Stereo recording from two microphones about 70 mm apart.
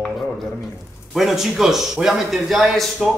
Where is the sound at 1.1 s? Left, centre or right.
Centre.